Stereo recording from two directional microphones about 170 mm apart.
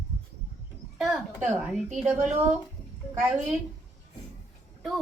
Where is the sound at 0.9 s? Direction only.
5° right (ahead or behind).